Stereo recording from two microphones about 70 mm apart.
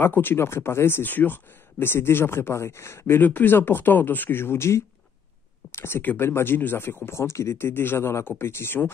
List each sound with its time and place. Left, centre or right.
0.0 s speech: left
3.2 s speech: left